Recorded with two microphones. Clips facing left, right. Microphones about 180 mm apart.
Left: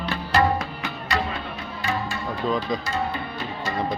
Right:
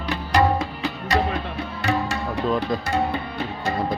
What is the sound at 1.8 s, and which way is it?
Music, 80° right.